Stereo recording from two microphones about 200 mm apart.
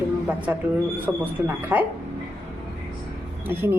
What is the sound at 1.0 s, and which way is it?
Speech, 10° right (ahead or behind).